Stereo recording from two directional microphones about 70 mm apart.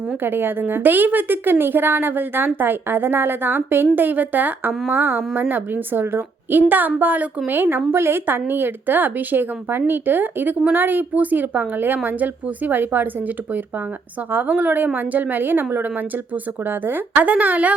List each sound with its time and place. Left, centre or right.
0.2 s a woman's voice: right